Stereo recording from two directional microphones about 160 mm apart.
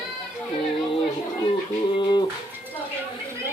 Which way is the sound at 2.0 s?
30° left (ahead or behind).